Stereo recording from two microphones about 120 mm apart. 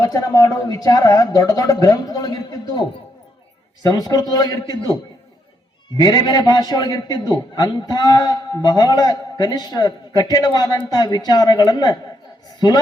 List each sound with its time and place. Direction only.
0.0 s a man's voice: 30° left (ahead or behind)
3.8 s a man's voice: 35° left (ahead or behind)
6.0 s a man's voice: 35° left (ahead or behind)